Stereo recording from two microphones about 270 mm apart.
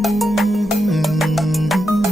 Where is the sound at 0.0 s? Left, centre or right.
Centre.